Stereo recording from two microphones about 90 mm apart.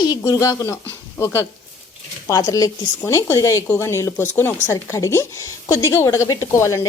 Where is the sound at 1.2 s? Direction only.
30° left (ahead or behind).